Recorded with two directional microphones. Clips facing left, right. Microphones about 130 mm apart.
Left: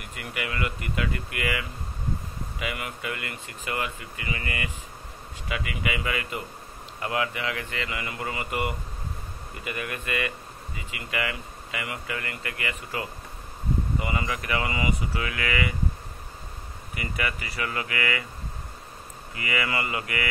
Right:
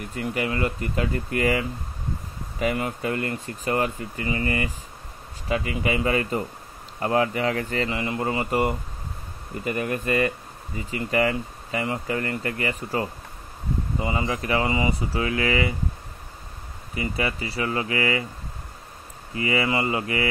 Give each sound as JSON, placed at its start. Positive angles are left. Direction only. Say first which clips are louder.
{"t": 0.0, "sound": "speech", "louder": "right 7 dB", "side_deg": -35}
{"t": 16.9, "sound": "speech", "louder": "right 4 dB", "side_deg": -30}
{"t": 19.3, "sound": "speech", "louder": "right 5 dB", "side_deg": -30}